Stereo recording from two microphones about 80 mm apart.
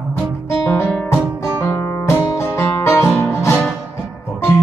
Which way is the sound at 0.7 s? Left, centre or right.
Left.